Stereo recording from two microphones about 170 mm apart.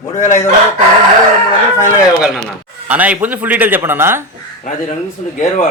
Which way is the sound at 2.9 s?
10° right (ahead or behind).